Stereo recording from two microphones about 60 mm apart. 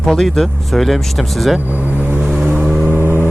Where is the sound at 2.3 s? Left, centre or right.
Centre.